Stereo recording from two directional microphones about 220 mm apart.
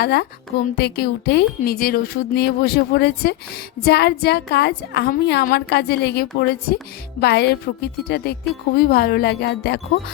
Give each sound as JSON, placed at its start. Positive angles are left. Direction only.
{"t": 0.0, "sound": "a woman's voice", "side_deg": 50}